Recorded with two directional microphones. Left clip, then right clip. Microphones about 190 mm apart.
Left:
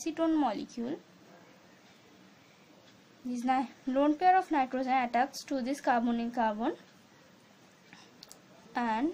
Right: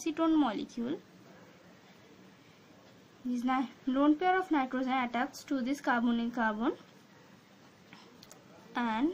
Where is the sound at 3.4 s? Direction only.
25° left (ahead or behind).